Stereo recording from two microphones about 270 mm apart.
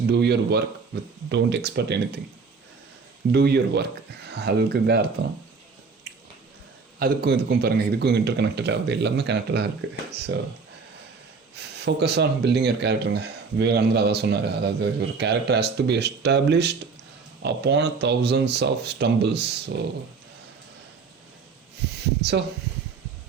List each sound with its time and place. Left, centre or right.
0.1 s speech: right
3.3 s speech: right
7.0 s speech: right
11.5 s speech: right
21.9 s a sound: right